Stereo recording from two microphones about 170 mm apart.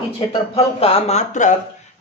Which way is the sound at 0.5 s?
35° left (ahead or behind).